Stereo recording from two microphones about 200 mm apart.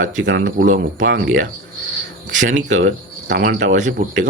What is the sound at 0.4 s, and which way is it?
Speech, 45° right (ahead or behind).